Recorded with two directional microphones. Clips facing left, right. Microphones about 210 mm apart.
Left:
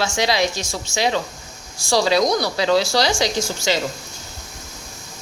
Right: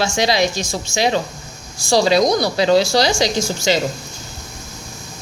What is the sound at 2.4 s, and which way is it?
A woman's voice, 20° right (ahead or behind).